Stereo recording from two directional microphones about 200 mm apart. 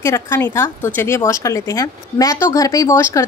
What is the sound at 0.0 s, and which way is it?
A woman's voice, 15° left (ahead or behind).